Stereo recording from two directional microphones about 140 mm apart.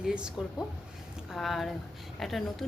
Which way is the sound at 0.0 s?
5° right (ahead or behind).